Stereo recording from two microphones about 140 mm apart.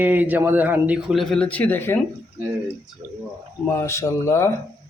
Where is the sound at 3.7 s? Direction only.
20° left (ahead or behind).